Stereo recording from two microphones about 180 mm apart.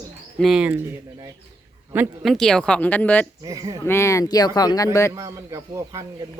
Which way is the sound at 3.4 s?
20° right (ahead or behind).